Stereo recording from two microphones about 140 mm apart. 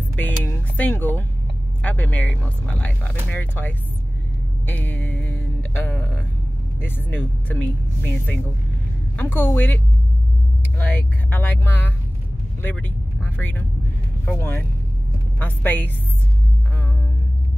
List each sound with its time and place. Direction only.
0.2 s music: 15° left (ahead or behind)
1.8 s speech: 10° left (ahead or behind)
4.6 s music: 15° left (ahead or behind)
6.8 s speech: 15° left (ahead or behind)
10.8 s speech: 15° left (ahead or behind)
12.6 s vehicle: 15° left (ahead or behind)
14.3 s speech: 15° left (ahead or behind)